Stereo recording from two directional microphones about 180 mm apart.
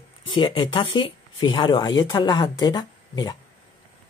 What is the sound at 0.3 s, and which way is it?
Speech, 25° left (ahead or behind).